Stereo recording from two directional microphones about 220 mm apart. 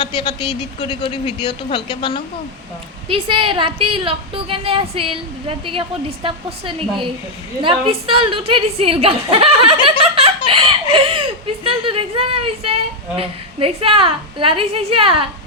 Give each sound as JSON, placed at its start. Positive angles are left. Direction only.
{"t": 0.0, "sound": "a man's voice", "side_deg": 20}
{"t": 3.1, "sound": "speech", "side_deg": -25}
{"t": 10.2, "sound": "a sound", "side_deg": -25}
{"t": 10.9, "sound": "speech", "side_deg": -25}